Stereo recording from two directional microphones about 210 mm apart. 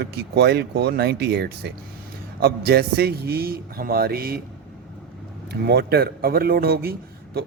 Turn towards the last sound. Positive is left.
turn(degrees=-45)  # may be behind; listen again after turning